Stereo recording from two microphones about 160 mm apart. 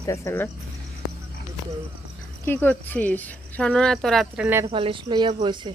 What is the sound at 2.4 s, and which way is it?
Speech, 10° left (ahead or behind).